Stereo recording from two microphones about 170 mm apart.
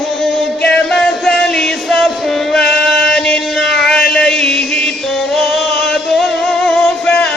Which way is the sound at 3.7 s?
5° left (ahead or behind).